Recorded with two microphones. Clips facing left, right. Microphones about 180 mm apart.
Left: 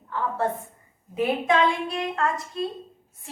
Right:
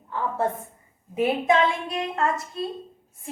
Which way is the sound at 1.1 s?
25° right (ahead or behind).